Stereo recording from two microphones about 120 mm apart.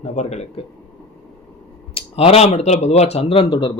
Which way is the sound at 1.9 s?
60° left (ahead or behind).